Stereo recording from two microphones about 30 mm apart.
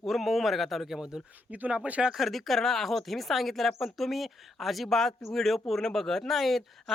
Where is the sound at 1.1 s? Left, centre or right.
Centre.